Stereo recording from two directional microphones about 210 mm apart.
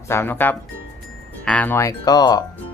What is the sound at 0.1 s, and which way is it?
Speech, 10° left (ahead or behind).